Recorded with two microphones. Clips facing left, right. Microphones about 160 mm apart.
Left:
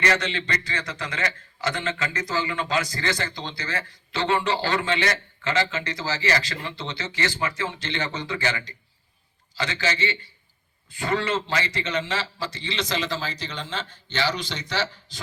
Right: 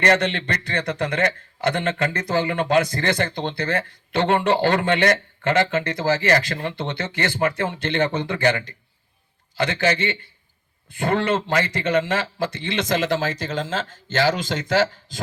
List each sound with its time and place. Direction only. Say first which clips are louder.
0.0 s a man's voice: right 5 dB; 55° right (ahead or behind)